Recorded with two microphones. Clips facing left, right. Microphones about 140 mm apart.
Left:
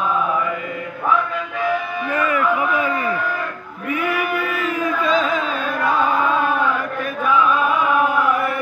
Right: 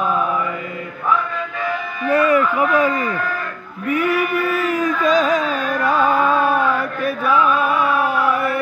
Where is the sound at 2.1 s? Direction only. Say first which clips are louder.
Right 4 dB; 35° right (ahead or behind).